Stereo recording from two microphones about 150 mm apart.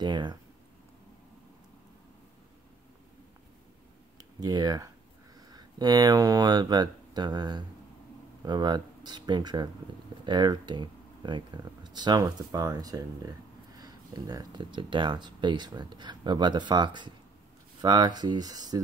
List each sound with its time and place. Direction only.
0.0 s speech: 30° right (ahead or behind)
4.2 s speech: 25° right (ahead or behind)